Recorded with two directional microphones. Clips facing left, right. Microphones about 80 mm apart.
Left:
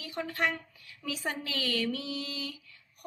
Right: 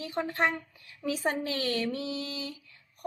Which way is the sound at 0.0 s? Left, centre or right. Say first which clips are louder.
Right 3 dB; right.